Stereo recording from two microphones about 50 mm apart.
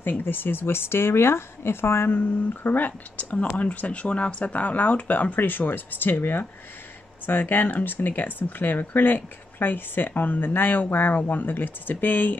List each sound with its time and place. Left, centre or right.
0.0 s speech: left
2.0 s speech: left